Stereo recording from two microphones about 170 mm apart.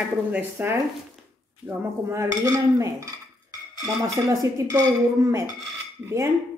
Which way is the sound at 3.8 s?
20° right (ahead or behind).